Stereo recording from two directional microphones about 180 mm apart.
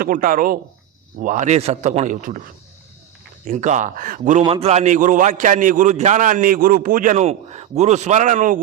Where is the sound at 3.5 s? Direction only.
45° right (ahead or behind).